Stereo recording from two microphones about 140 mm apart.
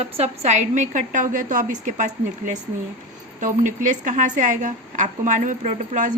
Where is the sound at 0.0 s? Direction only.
50° right (ahead or behind).